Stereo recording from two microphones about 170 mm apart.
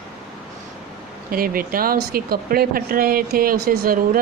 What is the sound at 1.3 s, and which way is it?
Speech, 60° right (ahead or behind).